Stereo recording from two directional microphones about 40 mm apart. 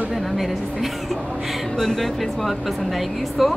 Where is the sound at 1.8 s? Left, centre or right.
Centre.